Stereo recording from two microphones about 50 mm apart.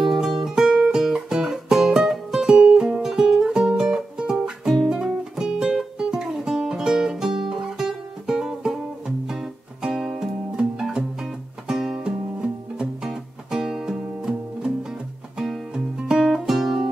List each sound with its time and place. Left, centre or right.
0.0 s music: centre
4.8 s guitar: centre
5.4 s music: centre